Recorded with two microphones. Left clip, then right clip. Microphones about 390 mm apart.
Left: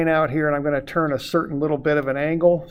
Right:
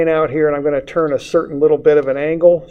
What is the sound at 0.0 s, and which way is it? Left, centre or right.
Speech, left.